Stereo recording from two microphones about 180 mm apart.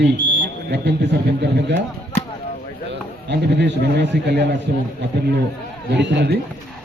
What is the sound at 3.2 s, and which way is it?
A man's voice, 70° right (ahead or behind).